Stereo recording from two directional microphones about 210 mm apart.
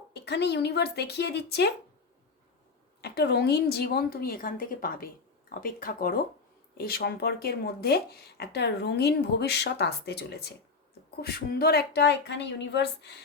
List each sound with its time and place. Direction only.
0.1 s speech: 55° left (ahead or behind)
3.0 s speech: 50° left (ahead or behind)